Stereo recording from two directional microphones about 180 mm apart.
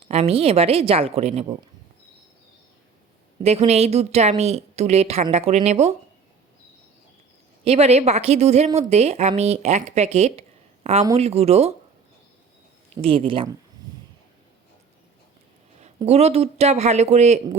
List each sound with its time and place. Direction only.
0.1 s a woman's voice: 35° right (ahead or behind)
3.4 s a woman's voice: 35° right (ahead or behind)
7.6 s a woman's voice: 35° right (ahead or behind)
13.0 s speech: 30° right (ahead or behind)
16.0 s a woman's voice: 35° right (ahead or behind)